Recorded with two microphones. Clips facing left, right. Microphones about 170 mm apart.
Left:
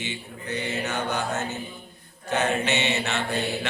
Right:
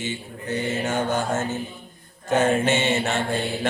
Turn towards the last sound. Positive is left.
turn(degrees=-50)  # may be behind; listen again after turning